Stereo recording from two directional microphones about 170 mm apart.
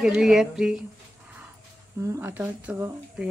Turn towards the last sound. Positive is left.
turn(degrees=-10)  # may be behind; listen again after turning